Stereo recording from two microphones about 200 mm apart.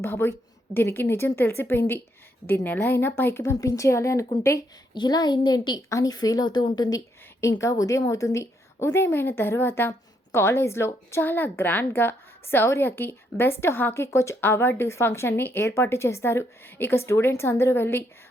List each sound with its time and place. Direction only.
0.0 s a woman's voice: 10° left (ahead or behind)